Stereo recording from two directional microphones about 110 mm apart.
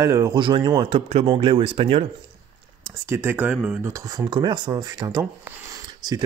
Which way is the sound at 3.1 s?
20° right (ahead or behind).